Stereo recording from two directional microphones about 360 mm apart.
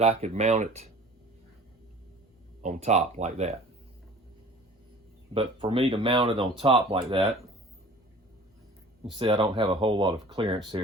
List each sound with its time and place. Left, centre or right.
0.0 s speech: centre
2.6 s speech: centre
5.3 s speech: centre
9.1 s speech: centre